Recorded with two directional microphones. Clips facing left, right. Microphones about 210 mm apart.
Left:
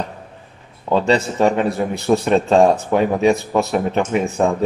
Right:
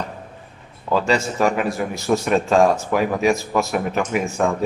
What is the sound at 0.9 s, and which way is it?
A man's voice, 30° left (ahead or behind).